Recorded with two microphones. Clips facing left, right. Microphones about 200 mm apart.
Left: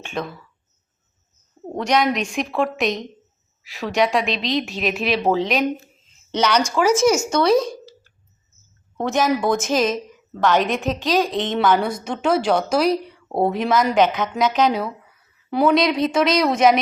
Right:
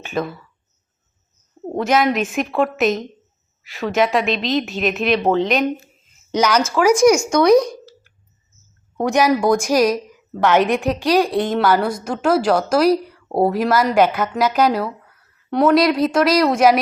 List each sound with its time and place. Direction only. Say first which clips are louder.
0.0 s a woman's voice: right 4 dB; 5° right (ahead or behind)
1.7 s a woman's voice: right 2 dB; 5° right (ahead or behind)
7.1 s a woman's voice: right 4 dB; 5° left (ahead or behind)
7.3 s speech: right 4 dB; 15° right (ahead or behind)
9.0 s speech: right 3 dB; 15° right (ahead or behind)
9.4 s a woman's voice: right 4 dB; 5° left (ahead or behind)
10.8 s a woman's voice: right 3 dB; 15° right (ahead or behind)